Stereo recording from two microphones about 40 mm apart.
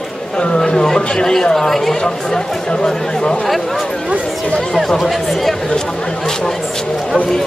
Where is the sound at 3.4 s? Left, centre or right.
Centre.